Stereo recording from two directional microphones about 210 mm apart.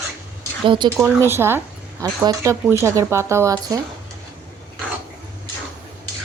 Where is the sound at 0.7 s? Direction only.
20° right (ahead or behind).